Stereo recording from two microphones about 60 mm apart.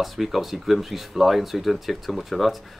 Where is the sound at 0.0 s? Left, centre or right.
Centre.